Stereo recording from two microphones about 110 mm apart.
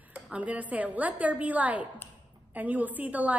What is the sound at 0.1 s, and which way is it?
A woman's voice, 15° right (ahead or behind).